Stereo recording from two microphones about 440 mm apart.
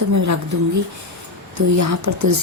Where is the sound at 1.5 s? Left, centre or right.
Right.